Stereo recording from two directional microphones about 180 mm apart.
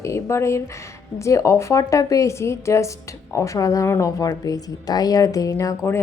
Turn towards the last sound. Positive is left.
turn(degrees=15)  # may be behind; listen again after turning